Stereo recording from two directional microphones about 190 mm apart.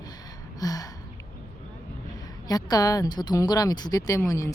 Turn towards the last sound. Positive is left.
turn(degrees=15)  # may be behind; listen again after turning